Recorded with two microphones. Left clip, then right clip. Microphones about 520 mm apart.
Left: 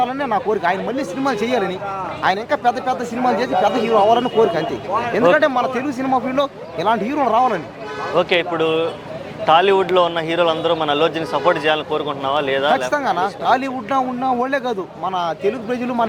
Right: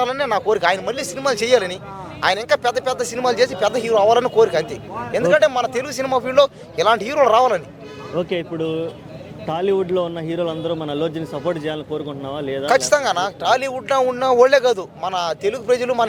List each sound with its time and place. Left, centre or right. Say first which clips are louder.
0.0 s a man's voice: even; right
8.1 s a man's voice: left 6 dB; centre
12.7 s a man's voice: right 2 dB; right